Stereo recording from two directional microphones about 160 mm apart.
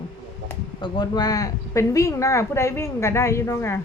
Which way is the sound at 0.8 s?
25° left (ahead or behind).